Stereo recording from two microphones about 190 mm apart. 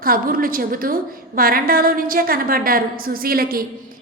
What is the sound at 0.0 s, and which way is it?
A woman's voice, 50° right (ahead or behind).